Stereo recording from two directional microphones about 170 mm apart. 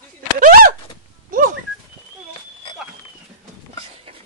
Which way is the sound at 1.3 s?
50° right (ahead or behind).